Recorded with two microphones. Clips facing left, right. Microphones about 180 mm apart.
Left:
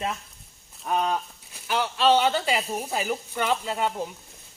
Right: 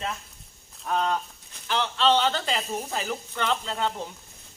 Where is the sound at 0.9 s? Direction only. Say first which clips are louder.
Left 1 dB; 10° left (ahead or behind).